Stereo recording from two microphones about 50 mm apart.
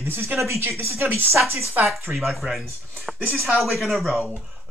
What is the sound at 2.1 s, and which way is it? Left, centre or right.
Speech, centre.